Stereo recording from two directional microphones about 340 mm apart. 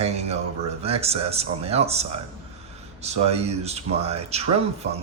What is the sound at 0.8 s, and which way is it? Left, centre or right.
Speech, centre.